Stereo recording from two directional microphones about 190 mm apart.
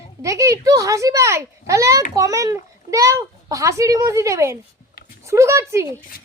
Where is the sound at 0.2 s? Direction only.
15° right (ahead or behind).